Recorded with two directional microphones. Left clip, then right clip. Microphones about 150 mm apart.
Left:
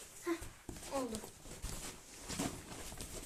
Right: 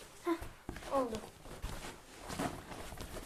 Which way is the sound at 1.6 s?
Centre (ahead or behind).